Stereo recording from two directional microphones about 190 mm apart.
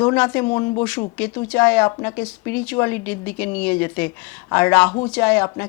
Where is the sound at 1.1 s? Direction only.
10° left (ahead or behind).